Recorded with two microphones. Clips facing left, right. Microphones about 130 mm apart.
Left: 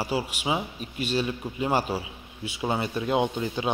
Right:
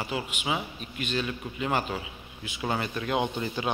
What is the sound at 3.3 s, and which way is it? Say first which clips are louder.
Speech: left 2 dB; 5° left (ahead or behind).